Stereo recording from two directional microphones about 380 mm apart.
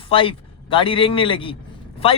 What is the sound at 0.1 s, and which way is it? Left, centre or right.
A man's voice, centre.